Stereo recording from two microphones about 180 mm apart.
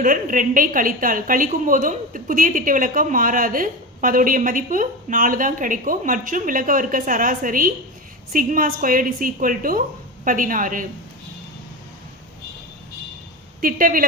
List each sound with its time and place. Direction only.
0.0 s a woman's voice: 50° right (ahead or behind)
13.6 s a woman's voice: 50° right (ahead or behind)